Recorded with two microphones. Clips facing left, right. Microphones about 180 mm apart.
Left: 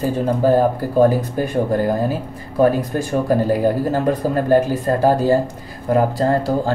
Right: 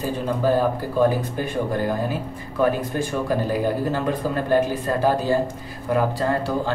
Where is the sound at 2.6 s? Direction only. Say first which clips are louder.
Left 5 dB; 40° left (ahead or behind).